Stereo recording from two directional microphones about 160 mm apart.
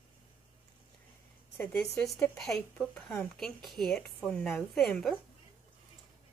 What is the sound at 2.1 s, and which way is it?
Speech, 15° left (ahead or behind).